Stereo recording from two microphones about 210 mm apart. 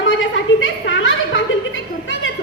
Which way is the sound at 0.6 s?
70° left (ahead or behind).